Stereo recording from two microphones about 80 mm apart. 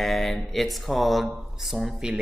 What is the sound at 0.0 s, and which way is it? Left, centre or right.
Speech, centre.